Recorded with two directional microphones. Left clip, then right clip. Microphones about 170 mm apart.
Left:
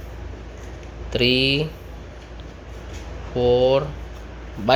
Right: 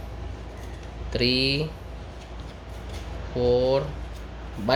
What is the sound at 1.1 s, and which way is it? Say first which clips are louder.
Speech: left 5 dB; 10° left (ahead or behind).